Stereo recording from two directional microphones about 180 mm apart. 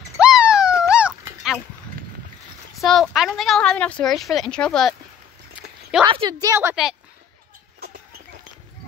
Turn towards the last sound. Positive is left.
turn(degrees=-5)  # may be behind; listen again after turning